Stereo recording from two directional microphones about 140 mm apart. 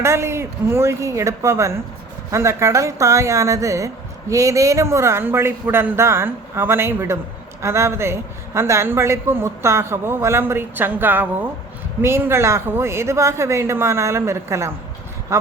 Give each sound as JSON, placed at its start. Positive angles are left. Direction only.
{"t": 0.0, "sound": "speech", "side_deg": -20}